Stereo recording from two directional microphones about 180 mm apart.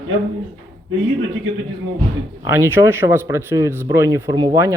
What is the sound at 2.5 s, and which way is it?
Speech, 15° right (ahead or behind).